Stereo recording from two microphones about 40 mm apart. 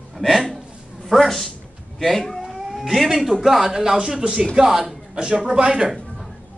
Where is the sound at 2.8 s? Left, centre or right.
Centre; by 5.9 s right.